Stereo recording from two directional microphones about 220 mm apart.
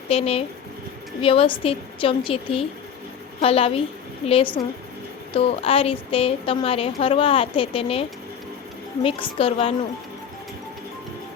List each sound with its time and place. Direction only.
0.1 s a woman's voice: 25° left (ahead or behind)
9.0 s a woman's voice: 25° left (ahead or behind)